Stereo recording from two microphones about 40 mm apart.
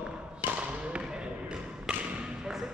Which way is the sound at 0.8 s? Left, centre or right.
Right.